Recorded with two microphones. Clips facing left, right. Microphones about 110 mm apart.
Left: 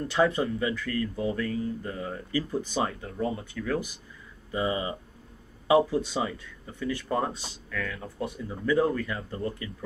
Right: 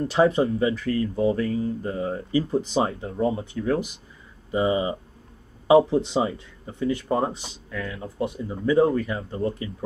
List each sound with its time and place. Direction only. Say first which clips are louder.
0.0 s speech: right 5 dB; 25° right (ahead or behind)